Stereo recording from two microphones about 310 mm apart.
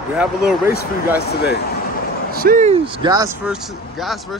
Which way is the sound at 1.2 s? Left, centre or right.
Left.